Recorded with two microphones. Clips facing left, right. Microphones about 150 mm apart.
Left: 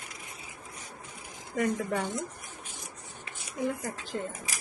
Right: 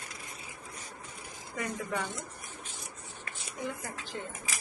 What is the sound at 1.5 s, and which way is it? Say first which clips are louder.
Speech: left 6 dB; 45° left (ahead or behind).